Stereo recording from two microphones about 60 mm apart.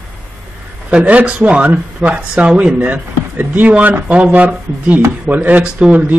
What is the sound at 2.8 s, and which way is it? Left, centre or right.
Speech, right.